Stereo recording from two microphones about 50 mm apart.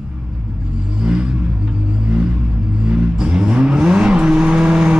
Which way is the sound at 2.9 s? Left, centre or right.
Right.